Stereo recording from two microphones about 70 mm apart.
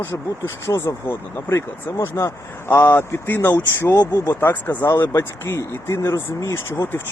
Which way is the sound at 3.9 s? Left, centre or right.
Left.